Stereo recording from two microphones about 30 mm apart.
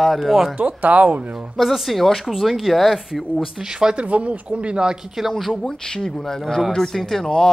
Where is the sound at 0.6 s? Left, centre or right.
Right.